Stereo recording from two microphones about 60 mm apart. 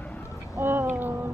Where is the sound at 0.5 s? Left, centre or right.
Right.